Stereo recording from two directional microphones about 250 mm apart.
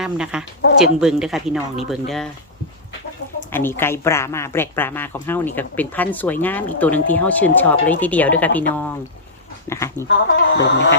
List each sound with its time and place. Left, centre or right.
0.0 s speech: centre
3.5 s speech: centre
10.3 s a sound: left